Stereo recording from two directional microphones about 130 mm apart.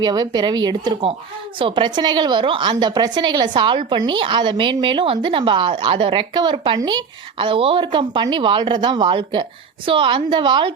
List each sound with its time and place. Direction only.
0.0 s a woman's voice: 30° right (ahead or behind)